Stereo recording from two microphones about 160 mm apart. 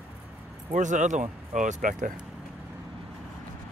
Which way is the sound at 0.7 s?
50° right (ahead or behind).